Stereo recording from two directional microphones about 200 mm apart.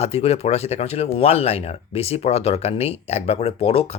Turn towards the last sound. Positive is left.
turn(degrees=30)  # may be behind; listen again after turning